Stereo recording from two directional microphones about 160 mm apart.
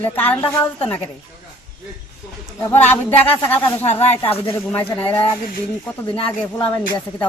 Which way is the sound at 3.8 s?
45° left (ahead or behind).